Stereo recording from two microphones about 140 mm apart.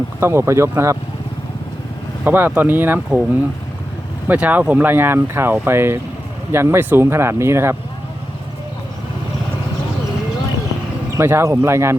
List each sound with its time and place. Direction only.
0.2 s speech: 20° right (ahead or behind)
2.2 s speech: 15° right (ahead or behind)
4.3 s speech: 10° right (ahead or behind)
11.2 s speech: 15° right (ahead or behind)